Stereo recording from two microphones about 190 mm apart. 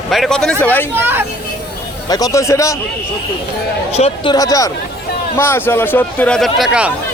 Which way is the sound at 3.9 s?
35° left (ahead or behind).